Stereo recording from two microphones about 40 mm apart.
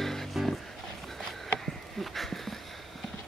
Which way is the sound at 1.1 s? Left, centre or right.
Centre.